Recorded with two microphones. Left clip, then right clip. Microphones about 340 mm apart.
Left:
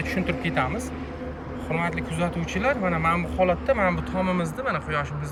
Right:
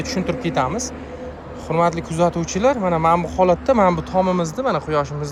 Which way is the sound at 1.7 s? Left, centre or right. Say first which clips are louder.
Right 9 dB; centre.